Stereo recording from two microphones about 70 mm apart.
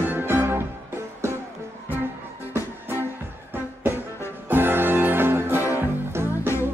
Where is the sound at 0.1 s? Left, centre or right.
Right.